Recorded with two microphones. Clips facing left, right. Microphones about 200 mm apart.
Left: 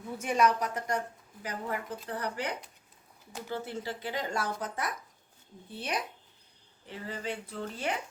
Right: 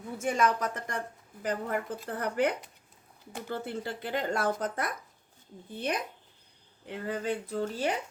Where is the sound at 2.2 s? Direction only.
55° right (ahead or behind).